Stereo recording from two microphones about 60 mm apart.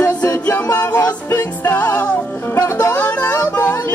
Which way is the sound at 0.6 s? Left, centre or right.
Left.